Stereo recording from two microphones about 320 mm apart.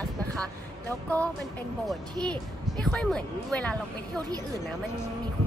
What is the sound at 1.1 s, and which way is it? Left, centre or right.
Speech, centre.